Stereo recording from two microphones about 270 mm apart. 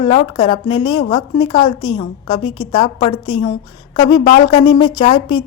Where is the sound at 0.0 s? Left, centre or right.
Centre.